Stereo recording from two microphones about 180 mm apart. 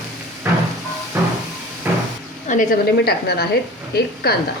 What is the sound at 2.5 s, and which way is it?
Speech, 45° left (ahead or behind).